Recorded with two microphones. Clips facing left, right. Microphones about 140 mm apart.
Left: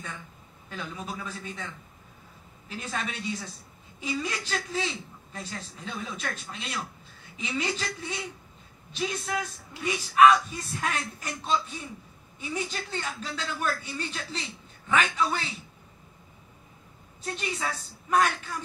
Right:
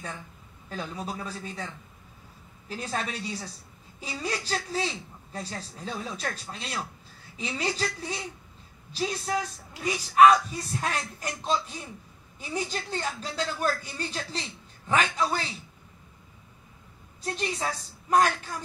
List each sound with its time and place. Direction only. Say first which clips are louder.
0.7 s speech: right 2 dB; 35° right (ahead or behind)
2.7 s speech: right 2 dB; 35° right (ahead or behind)
17.2 s speech: right 2 dB; 35° right (ahead or behind)